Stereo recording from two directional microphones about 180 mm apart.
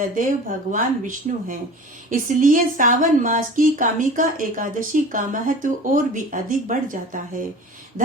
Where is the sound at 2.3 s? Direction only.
45° right (ahead or behind).